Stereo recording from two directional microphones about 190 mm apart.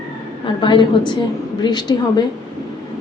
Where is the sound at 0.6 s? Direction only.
25° left (ahead or behind).